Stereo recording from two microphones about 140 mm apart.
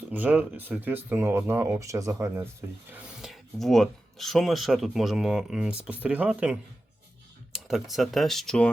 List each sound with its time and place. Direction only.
0.1 s speech: 10° right (ahead or behind)
3.2 s speech: centre (ahead or behind)